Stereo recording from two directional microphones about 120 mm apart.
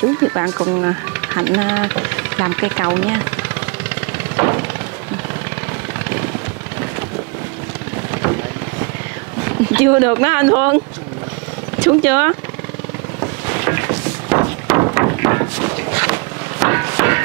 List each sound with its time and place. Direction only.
0.0 s speech: 25° right (ahead or behind)
4.4 s a sound: 20° right (ahead or behind)
8.1 s vehicle: 25° right (ahead or behind)
9.4 s speech: 20° right (ahead or behind)
12.0 s speech: 20° right (ahead or behind)
13.2 s boat: 20° right (ahead or behind)
14.4 s a sound: 25° right (ahead or behind)